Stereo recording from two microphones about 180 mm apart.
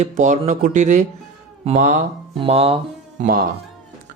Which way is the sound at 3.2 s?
50° right (ahead or behind).